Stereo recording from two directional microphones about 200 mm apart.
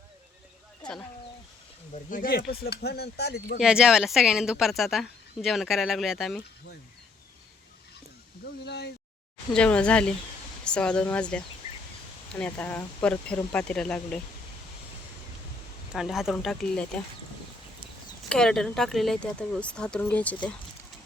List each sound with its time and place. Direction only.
1.9 s speech: 45° left (ahead or behind)
3.6 s speech: 5° right (ahead or behind)
8.6 s speech: 55° left (ahead or behind)
9.5 s speech: 5° left (ahead or behind)
15.9 s speech: centre (ahead or behind)
18.3 s speech: 5° left (ahead or behind)